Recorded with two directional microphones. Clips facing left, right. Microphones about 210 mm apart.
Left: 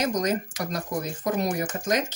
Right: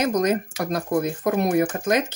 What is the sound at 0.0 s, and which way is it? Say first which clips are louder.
Speech: right 4 dB; 55° right (ahead or behind).